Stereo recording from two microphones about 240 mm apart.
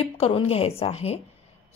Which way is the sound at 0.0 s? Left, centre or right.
Left.